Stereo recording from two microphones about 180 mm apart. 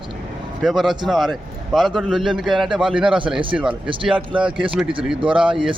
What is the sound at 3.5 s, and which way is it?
Speech, 5° right (ahead or behind).